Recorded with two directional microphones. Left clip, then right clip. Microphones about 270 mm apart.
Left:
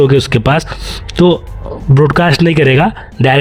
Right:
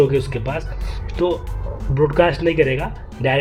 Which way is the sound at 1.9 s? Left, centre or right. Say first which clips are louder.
Left 5 dB; left.